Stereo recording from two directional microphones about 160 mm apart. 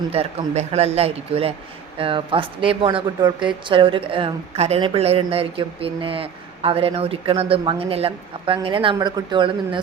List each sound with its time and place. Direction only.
0.1 s a woman's voice: 40° right (ahead or behind)